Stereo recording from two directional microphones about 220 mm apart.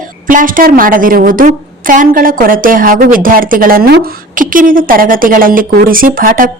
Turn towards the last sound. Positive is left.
turn(degrees=-40)  # may be behind; listen again after turning